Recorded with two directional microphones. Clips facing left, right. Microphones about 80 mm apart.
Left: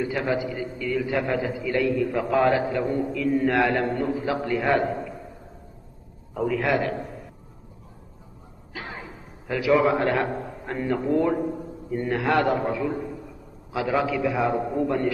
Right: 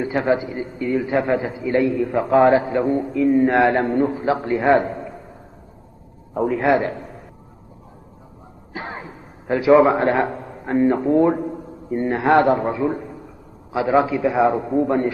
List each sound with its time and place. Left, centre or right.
0.0 s a man's voice: right
6.3 s a man's voice: right
8.7 s a sound: right
9.5 s a man's voice: right